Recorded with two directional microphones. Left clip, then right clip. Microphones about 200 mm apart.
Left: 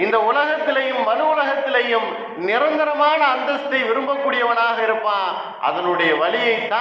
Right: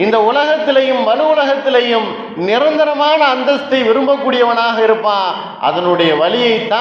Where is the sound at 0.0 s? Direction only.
55° right (ahead or behind).